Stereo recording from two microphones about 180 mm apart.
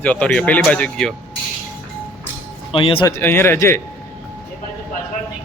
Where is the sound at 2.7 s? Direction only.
30° left (ahead or behind).